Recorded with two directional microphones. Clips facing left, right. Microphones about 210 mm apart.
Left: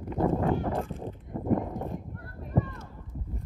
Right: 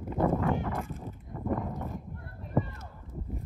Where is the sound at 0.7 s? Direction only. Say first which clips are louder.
Left 4 dB; 30° left (ahead or behind).